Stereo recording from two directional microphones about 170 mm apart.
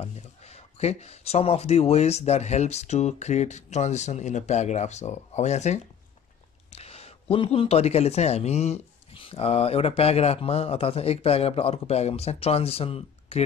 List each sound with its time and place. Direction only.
0.0 s speech: 40° left (ahead or behind)